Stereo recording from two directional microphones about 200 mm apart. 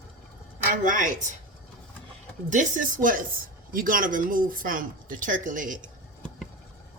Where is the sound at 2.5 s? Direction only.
40° right (ahead or behind).